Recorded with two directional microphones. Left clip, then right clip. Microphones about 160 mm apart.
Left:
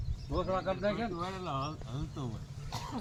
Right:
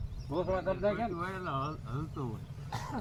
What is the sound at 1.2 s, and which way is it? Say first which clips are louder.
Speech: right 1 dB; 90° left.